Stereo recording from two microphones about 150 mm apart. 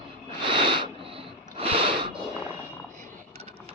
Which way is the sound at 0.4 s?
35° right (ahead or behind).